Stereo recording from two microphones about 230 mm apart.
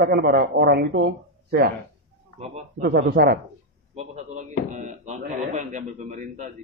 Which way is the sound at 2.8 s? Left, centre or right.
Right.